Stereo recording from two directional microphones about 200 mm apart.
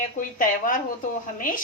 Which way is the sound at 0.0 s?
40° left (ahead or behind).